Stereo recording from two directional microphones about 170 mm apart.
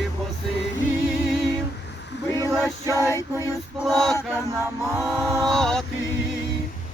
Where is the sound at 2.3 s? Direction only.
20° right (ahead or behind).